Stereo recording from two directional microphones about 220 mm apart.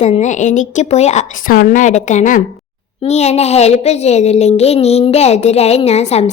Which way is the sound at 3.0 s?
30° left (ahead or behind).